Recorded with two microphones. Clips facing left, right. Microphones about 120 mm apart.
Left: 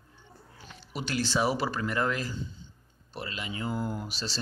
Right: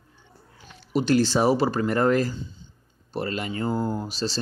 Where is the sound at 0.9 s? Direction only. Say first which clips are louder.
Right 9 dB; 40° right (ahead or behind).